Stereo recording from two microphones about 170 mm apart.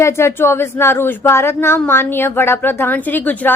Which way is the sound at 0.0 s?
15° left (ahead or behind).